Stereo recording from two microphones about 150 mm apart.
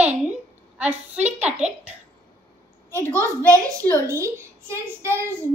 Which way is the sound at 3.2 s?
20° right (ahead or behind).